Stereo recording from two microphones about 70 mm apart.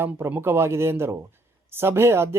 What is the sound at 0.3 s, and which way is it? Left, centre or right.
Speech, right.